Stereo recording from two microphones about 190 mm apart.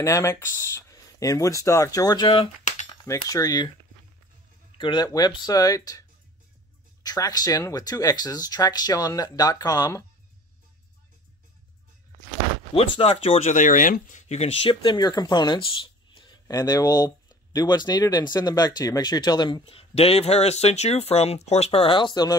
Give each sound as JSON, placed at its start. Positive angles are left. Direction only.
{"t": 0.0, "sound": "speech", "side_deg": 15}
{"t": 4.7, "sound": "speech", "side_deg": 25}
{"t": 12.7, "sound": "speech", "side_deg": 25}